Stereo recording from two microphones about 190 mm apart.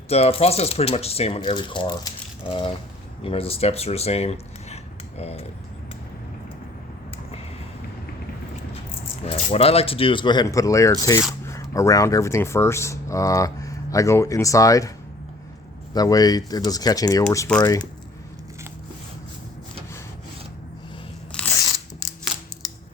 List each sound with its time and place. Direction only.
0.1 s speech: 30° left (ahead or behind)
9.2 s speech: 30° left (ahead or behind)
16.0 s speech: 20° left (ahead or behind)
21.3 s biting: 5° left (ahead or behind)